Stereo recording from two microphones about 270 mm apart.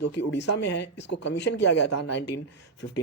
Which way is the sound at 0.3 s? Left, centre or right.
Left.